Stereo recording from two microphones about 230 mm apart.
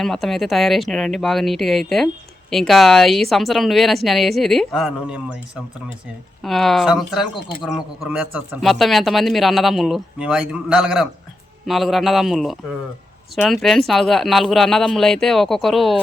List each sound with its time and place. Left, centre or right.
0.0 s speech: centre
6.4 s speech: centre